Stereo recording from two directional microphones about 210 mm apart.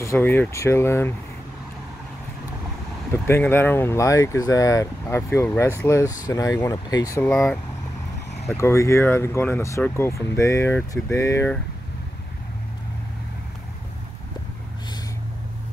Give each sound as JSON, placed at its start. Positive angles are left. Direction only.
{"t": 0.0, "sound": "speech", "side_deg": 10}
{"t": 3.1, "sound": "speech", "side_deg": 10}
{"t": 7.2, "sound": "speech", "side_deg": 5}
{"t": 8.5, "sound": "speech", "side_deg": 15}